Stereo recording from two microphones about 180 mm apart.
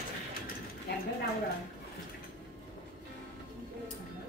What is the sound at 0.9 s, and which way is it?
Speech, 65° left (ahead or behind).